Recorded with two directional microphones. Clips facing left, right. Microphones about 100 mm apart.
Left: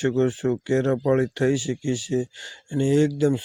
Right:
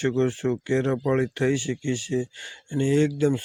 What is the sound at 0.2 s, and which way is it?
Speech, 15° left (ahead or behind).